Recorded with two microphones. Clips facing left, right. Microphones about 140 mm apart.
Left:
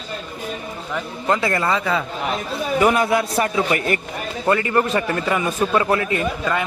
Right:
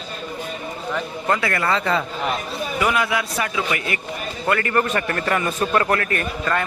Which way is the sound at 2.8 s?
40° left (ahead or behind).